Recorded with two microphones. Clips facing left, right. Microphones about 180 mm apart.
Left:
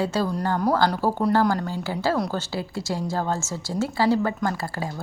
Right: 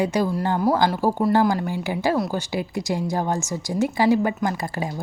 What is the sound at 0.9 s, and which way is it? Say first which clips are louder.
Speech: right 2 dB; 5° right (ahead or behind).